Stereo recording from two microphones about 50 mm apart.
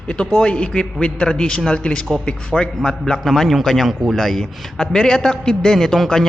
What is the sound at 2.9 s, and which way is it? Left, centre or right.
A man's voice, centre.